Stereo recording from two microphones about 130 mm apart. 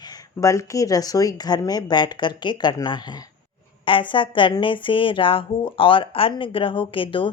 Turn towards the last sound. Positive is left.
turn(degrees=40)  # may be behind; listen again after turning